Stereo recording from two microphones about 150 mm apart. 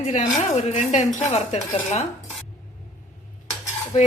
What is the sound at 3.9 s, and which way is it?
Speech, 50° left (ahead or behind).